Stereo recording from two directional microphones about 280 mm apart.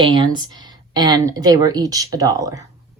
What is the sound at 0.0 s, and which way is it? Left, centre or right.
Speech, centre.